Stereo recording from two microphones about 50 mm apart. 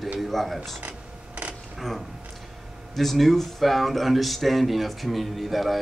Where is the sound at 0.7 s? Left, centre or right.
Right.